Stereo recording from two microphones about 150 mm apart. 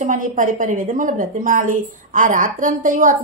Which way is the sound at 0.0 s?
60° right (ahead or behind).